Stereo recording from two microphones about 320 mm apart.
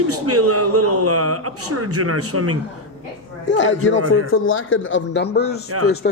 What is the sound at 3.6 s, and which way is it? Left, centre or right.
Speech, left.